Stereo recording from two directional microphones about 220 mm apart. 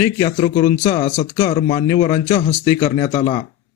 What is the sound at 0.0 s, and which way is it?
A man's voice, 25° left (ahead or behind).